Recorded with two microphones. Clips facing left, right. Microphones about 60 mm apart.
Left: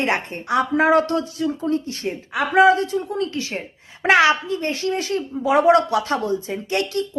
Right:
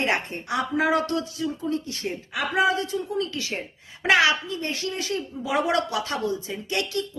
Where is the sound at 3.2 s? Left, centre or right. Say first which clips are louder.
Left 3 dB; left.